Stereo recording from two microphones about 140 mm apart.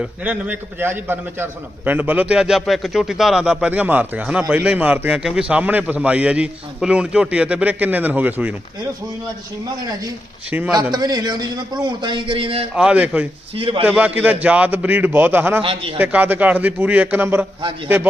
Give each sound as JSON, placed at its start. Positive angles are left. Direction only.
{"t": 0.0, "sound": "a man's voice", "side_deg": -10}
{"t": 10.9, "sound": "a man's voice", "side_deg": -30}
{"t": 12.7, "sound": "a man's voice", "side_deg": -10}
{"t": 13.6, "sound": "a man's voice", "side_deg": -40}
{"t": 13.8, "sound": "a man's voice", "side_deg": -10}
{"t": 15.6, "sound": "a man's voice", "side_deg": -40}
{"t": 16.0, "sound": "a man's voice", "side_deg": -15}